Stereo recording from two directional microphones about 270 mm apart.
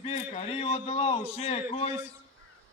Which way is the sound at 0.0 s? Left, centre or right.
Left.